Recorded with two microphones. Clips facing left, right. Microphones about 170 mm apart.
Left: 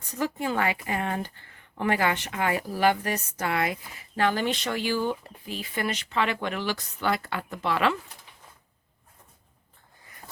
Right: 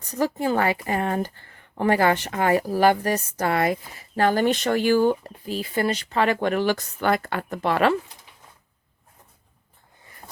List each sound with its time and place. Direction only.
0.1 s speech: 35° right (ahead or behind)